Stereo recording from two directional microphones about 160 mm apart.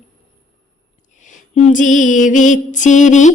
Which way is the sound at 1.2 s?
45° left (ahead or behind).